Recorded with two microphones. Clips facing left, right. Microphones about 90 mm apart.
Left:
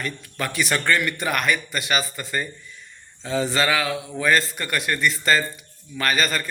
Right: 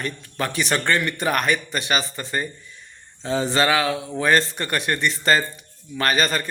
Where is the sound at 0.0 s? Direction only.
30° right (ahead or behind).